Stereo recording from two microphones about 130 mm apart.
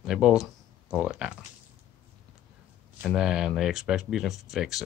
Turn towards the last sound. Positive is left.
turn(degrees=0)  # may be behind; listen again after turning